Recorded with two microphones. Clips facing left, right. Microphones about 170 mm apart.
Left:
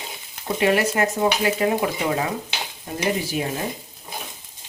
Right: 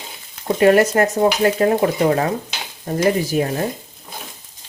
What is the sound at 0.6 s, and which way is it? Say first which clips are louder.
Speech: right 7 dB; 45° right (ahead or behind).